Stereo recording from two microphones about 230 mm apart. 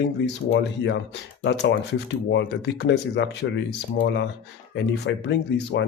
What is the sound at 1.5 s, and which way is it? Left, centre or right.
Speech, left.